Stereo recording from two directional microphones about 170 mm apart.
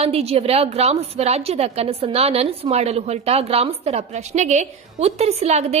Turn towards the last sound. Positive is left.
turn(degrees=-40)  # may be behind; listen again after turning